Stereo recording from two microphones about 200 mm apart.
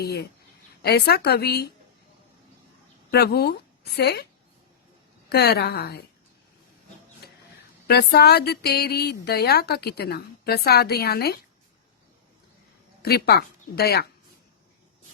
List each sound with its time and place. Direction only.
0.0 s speech: 55° left (ahead or behind)
3.1 s a woman's voice: 55° left (ahead or behind)
5.3 s speech: 55° left (ahead or behind)
7.2 s a sound: 55° left (ahead or behind)
7.9 s speech: 55° left (ahead or behind)
13.0 s speech: 55° left (ahead or behind)